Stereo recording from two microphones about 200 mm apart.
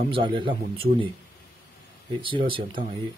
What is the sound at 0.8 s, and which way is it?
Speech, 50° right (ahead or behind).